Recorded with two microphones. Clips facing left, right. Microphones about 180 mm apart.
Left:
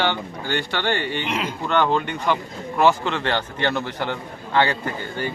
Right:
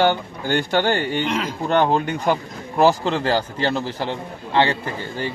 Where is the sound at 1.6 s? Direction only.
40° right (ahead or behind).